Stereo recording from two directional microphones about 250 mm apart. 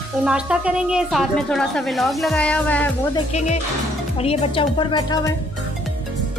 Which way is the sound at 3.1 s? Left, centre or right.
Left.